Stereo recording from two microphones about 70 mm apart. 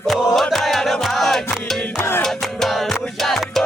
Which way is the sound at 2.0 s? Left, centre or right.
Left.